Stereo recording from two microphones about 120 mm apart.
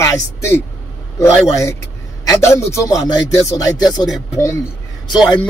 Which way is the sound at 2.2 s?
30° left (ahead or behind).